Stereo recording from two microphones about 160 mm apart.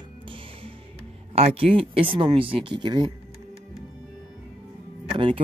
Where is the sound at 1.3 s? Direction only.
40° right (ahead or behind).